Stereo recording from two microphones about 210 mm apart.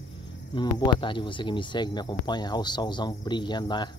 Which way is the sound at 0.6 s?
20° left (ahead or behind).